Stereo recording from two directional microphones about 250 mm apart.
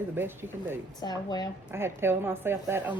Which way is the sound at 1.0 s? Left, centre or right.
Centre.